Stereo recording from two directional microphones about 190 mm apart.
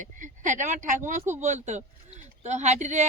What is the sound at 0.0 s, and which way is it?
Speech, 40° right (ahead or behind).